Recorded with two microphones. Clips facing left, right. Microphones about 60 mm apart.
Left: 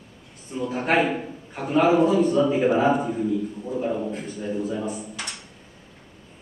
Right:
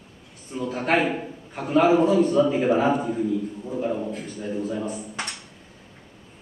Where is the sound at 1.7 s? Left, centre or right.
Centre.